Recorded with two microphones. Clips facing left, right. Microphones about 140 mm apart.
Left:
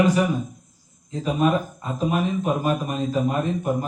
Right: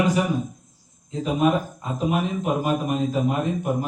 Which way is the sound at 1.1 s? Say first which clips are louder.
Even; 15° right (ahead or behind).